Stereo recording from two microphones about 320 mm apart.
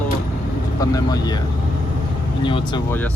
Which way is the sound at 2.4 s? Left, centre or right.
Centre.